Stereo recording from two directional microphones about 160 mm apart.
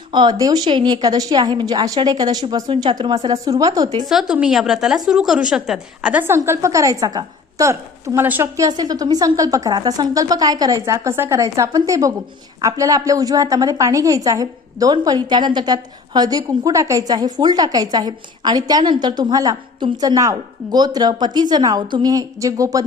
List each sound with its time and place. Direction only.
0.1 s a woman's voice: 25° right (ahead or behind)
4.0 s a woman's voice: centre (ahead or behind); by 22.8 s 20° right (ahead or behind)